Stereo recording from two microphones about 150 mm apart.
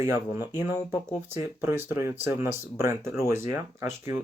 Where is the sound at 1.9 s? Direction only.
15° right (ahead or behind).